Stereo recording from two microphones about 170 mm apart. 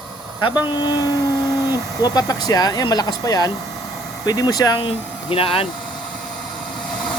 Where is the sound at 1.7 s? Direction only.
20° left (ahead or behind).